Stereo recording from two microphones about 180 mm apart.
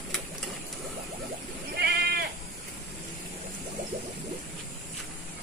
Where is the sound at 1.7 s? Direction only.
65° right (ahead or behind).